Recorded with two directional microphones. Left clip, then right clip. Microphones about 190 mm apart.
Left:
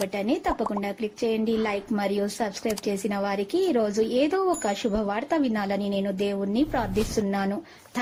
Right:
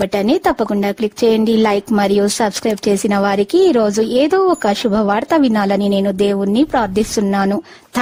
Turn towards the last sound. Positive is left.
turn(degrees=-55)  # may be behind; listen again after turning